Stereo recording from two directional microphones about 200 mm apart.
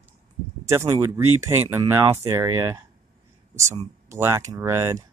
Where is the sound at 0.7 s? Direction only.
15° right (ahead or behind).